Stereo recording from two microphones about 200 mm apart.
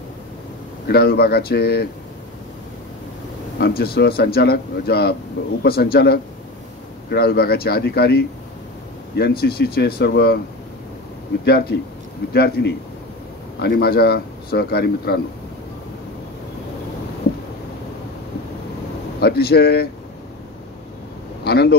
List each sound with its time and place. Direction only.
0.8 s speech: 50° left (ahead or behind)
3.5 s speech: 50° left (ahead or behind)
11.4 s speech: 50° left (ahead or behind)
19.2 s speech: 50° left (ahead or behind)
21.5 s speech: 50° left (ahead or behind)